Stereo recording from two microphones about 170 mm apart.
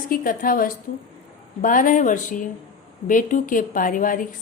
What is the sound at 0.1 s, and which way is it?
A woman's voice, 55° left (ahead or behind).